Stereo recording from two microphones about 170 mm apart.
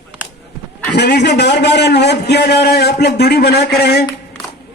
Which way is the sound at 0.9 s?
80° left.